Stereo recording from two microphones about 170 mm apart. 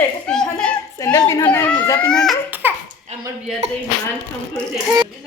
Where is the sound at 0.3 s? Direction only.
5° left (ahead or behind).